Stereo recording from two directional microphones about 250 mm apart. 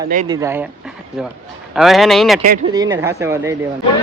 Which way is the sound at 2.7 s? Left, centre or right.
Centre.